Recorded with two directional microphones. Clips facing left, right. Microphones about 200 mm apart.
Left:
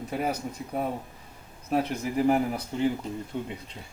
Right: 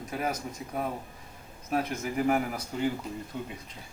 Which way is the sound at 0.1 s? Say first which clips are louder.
Left 2 dB; 30° left (ahead or behind).